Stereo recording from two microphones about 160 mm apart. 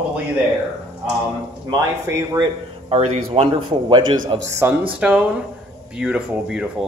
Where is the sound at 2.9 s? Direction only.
40° right (ahead or behind).